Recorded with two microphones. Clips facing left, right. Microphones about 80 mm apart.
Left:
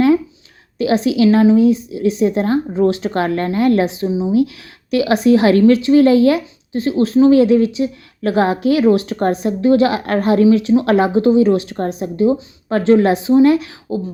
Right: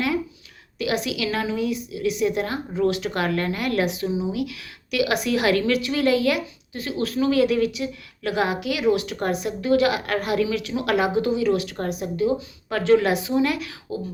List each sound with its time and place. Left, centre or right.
0.8 s a woman's voice: left